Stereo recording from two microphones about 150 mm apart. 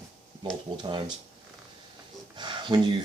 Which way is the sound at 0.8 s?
30° right (ahead or behind).